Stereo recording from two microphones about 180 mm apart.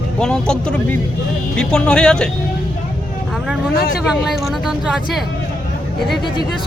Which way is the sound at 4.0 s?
Centre (ahead or behind).